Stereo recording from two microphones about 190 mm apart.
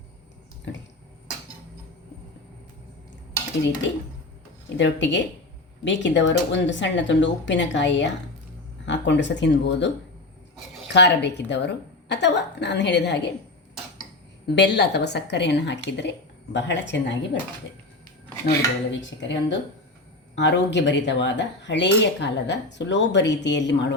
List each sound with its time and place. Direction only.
4.8 s cutlery: 70° left (ahead or behind)
10.9 s a woman's voice: 65° left (ahead or behind)
14.4 s a woman's voice: 65° left (ahead or behind)
18.4 s cutlery: 70° left (ahead or behind)